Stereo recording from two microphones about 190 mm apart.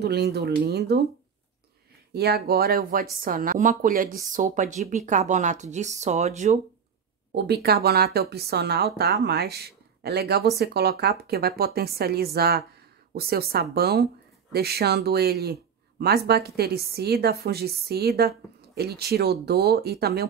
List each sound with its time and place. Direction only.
0.0 s speech: 60° right (ahead or behind)
2.1 s speech: 55° right (ahead or behind); by 6.6 s 40° right (ahead or behind)
7.3 s speech: 60° right (ahead or behind)